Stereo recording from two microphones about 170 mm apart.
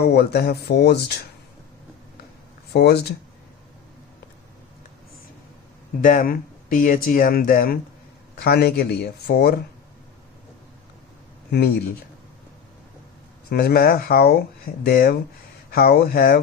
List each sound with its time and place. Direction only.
0.0 s speech: 70° left (ahead or behind)
2.7 s speech: 75° left (ahead or behind)
6.0 s speech: 55° left (ahead or behind)
8.4 s speech: 70° left (ahead or behind)
13.5 s speech: 65° left (ahead or behind)